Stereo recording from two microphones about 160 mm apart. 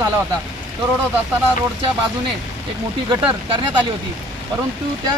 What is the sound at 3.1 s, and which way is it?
Speech, 35° right (ahead or behind).